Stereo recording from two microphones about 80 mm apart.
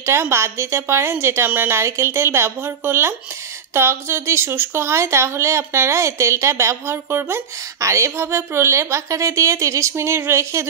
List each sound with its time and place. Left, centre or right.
0.0 s speech: right